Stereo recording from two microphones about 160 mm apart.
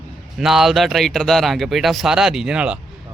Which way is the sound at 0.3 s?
Centre (ahead or behind).